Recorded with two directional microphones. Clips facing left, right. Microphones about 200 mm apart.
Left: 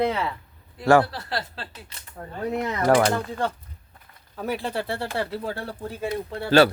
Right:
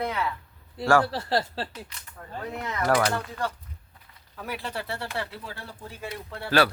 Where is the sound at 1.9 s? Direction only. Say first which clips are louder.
Left 2 dB; 35° left (ahead or behind).